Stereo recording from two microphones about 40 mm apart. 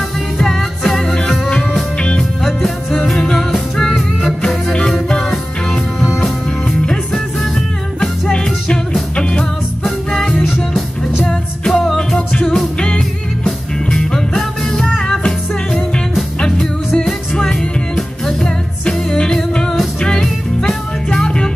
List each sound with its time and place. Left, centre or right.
0.4 s music: centre
1.5 s music: centre
2.4 s music: centre
5.2 s music: centre
7.3 s music: centre
9.1 s music: left
10.1 s music: centre
12.2 s music: left
14.3 s music: centre
15.2 s music: left
20.2 s music: centre